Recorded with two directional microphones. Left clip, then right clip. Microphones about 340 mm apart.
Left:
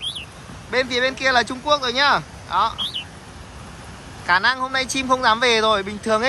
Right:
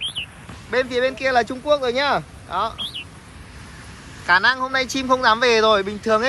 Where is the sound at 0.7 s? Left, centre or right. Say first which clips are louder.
Even; centre.